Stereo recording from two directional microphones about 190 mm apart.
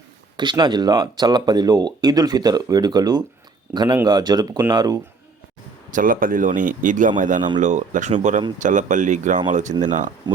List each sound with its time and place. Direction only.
0.3 s speech: 25° right (ahead or behind)
5.9 s speech: 45° right (ahead or behind)
10.3 s speech: 25° right (ahead or behind)